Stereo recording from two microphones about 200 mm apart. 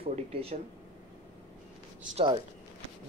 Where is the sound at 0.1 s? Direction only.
30° right (ahead or behind).